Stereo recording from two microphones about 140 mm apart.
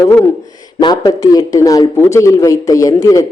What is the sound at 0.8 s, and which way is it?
A man's voice, 30° left (ahead or behind).